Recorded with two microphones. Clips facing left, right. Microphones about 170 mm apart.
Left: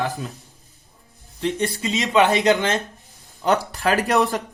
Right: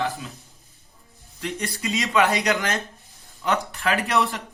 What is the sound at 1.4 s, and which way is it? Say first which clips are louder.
Speech: left 6 dB; 25° left (ahead or behind).